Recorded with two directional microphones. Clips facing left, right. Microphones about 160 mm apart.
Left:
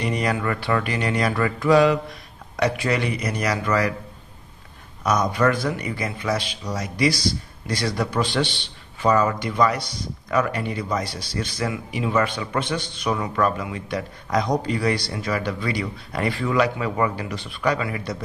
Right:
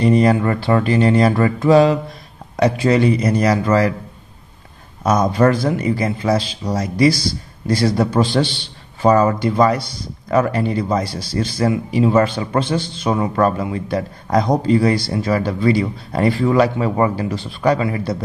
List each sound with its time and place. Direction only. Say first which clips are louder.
0.0 s speech: right 10 dB; 30° right (ahead or behind)
5.0 s a man's voice: right 6 dB; 30° right (ahead or behind)